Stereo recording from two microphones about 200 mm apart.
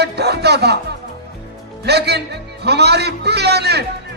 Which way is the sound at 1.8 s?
55° right (ahead or behind).